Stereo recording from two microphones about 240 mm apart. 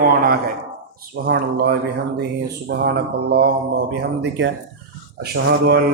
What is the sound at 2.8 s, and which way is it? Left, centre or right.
A man's voice, right.